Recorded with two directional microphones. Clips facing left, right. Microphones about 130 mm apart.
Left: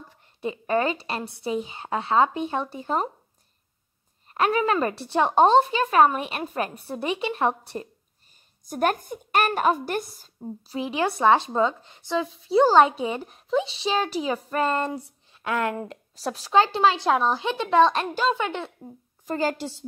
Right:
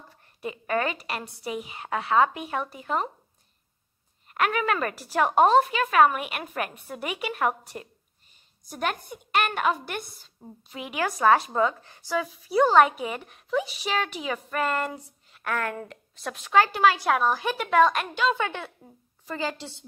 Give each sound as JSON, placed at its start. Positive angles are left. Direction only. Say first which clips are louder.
{"t": 0.2, "sound": "a woman's voice", "louder": "left 4 dB", "side_deg": 25}
{"t": 4.3, "sound": "a woman's voice", "louder": "left 3 dB", "side_deg": 30}
{"t": 8.6, "sound": "a woman's voice", "louder": "left 6 dB", "side_deg": 45}
{"t": 16.2, "sound": "a woman's voice", "louder": "left 1 dB", "side_deg": 35}
{"t": 18.3, "sound": "a woman's voice", "louder": "left 2 dB", "side_deg": 20}
{"t": 19.2, "sound": "a woman's voice", "louder": "left 5 dB", "side_deg": 45}